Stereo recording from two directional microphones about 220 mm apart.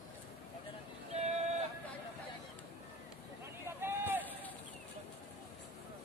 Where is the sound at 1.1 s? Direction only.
30° right (ahead or behind).